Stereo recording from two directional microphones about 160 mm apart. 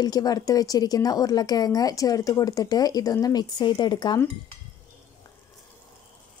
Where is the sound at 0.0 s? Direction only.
25° left (ahead or behind).